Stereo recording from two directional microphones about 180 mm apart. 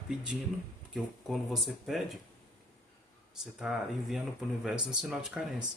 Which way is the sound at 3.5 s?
Centre (ahead or behind).